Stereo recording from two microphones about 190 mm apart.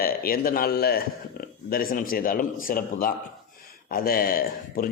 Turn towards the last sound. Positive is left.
turn(degrees=50)  # may be behind; listen again after turning